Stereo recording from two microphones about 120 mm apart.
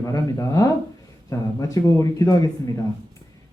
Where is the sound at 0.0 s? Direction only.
30° left (ahead or behind).